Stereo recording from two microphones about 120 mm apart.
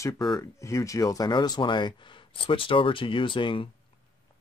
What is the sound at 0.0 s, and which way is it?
Speech, 35° left (ahead or behind).